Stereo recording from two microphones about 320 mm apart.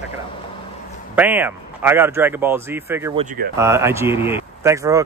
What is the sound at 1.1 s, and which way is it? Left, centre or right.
Speech, centre.